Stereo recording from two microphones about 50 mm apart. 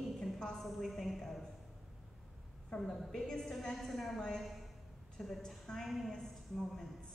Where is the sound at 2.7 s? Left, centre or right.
Centre.